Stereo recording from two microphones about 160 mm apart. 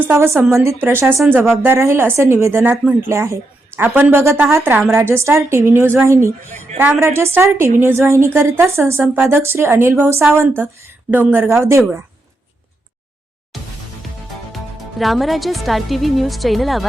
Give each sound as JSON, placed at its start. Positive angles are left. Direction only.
{"t": 0.1, "sound": "a woman's voice", "side_deg": -15}
{"t": 14.5, "sound": "speech", "side_deg": 0}